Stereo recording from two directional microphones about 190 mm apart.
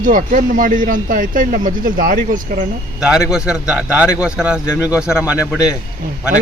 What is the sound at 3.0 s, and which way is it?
A man's voice, 5° right (ahead or behind).